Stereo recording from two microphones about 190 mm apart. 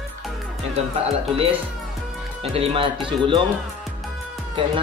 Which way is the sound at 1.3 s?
30° right (ahead or behind).